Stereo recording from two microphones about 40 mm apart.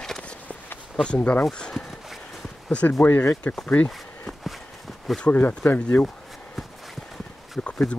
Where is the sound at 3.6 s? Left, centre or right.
Left.